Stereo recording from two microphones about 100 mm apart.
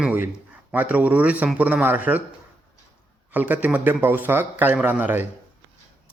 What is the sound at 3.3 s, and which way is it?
A man's voice, 15° right (ahead or behind).